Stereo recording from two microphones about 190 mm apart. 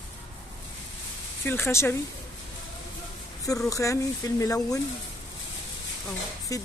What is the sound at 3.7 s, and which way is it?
Speech, 15° left (ahead or behind).